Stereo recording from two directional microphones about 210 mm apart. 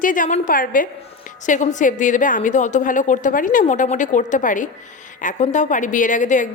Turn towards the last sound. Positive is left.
turn(degrees=35)  # may be behind; listen again after turning